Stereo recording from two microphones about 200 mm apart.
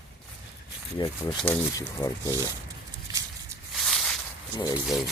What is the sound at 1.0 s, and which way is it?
Speech, 20° left (ahead or behind).